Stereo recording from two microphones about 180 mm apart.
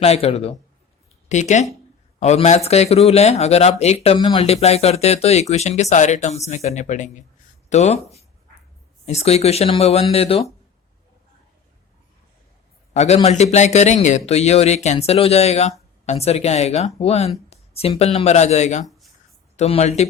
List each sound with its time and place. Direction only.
0.0 s speech: 35° left (ahead or behind)
12.9 s speech: 35° left (ahead or behind)